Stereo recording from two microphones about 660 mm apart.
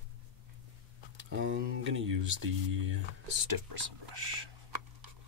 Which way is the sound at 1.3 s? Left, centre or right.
Centre.